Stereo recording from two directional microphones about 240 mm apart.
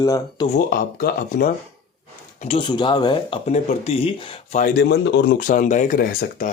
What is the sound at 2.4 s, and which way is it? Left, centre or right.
Speech, left.